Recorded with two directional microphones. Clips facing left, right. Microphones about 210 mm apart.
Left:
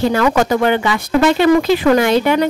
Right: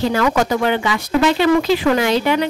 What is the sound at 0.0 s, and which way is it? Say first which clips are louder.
Speech: left 3 dB; 55° left (ahead or behind).